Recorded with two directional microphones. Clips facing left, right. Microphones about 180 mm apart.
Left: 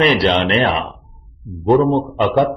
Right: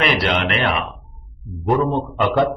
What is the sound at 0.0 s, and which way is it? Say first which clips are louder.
Speech: left 5 dB; 30° left (ahead or behind).